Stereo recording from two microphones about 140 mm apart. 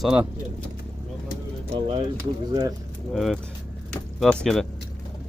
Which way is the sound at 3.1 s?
Centre (ahead or behind).